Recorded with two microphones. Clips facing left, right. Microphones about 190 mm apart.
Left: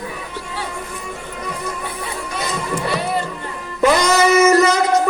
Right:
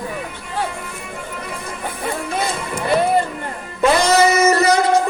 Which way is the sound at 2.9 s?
50° right (ahead or behind).